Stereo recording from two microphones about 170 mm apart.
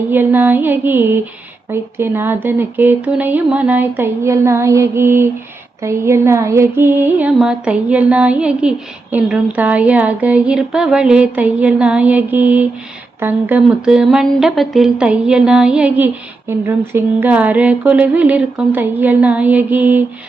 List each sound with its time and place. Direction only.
0.1 s speech: 10° right (ahead or behind)